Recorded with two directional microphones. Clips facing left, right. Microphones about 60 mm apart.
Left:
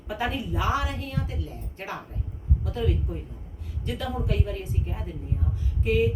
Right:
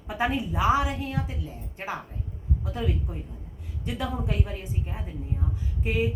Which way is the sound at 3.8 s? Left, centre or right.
Centre.